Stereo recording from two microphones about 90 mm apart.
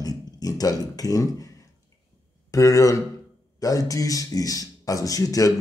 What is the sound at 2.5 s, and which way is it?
Speech, 40° left (ahead or behind).